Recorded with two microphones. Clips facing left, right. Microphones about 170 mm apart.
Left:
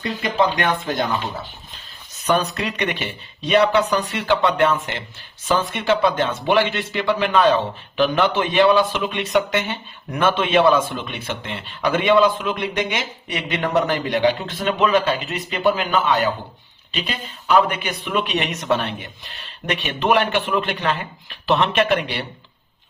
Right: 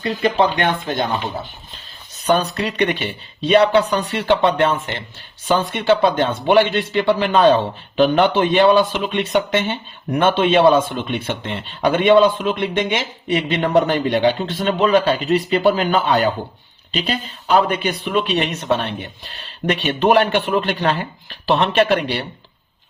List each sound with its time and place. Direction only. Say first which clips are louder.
0.3 s speech: right 2 dB; 30° right (ahead or behind)
2.2 s speech: right 2 dB; 30° right (ahead or behind)